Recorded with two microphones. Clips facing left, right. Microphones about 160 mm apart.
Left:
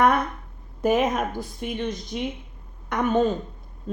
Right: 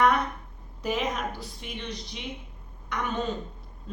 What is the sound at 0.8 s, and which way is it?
Speech, 50° left (ahead or behind).